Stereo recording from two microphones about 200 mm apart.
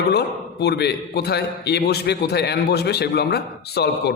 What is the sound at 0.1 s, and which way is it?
A man's voice, 55° left (ahead or behind).